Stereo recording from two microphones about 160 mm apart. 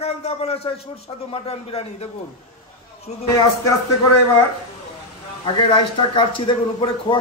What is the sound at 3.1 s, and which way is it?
Speech, 45° left (ahead or behind).